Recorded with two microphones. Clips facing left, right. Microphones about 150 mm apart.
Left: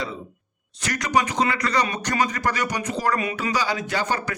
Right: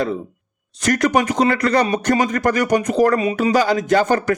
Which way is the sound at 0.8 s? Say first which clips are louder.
Right 6 dB; 50° right (ahead or behind).